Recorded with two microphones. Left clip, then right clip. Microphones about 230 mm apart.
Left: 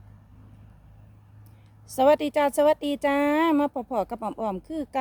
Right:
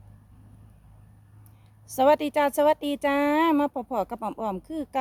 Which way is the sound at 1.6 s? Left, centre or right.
Centre.